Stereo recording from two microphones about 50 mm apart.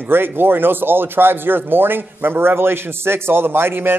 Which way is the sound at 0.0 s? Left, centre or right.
Right.